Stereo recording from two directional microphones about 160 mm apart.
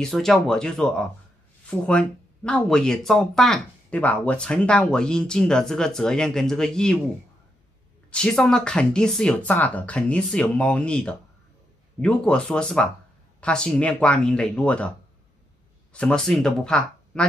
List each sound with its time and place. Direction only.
0.0 s speech: centre (ahead or behind)
8.1 s speech: 5° left (ahead or behind)
15.9 s speech: 5° left (ahead or behind)